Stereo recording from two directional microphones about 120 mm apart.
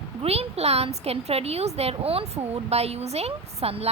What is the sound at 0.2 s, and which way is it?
A woman's voice, 55° right (ahead or behind).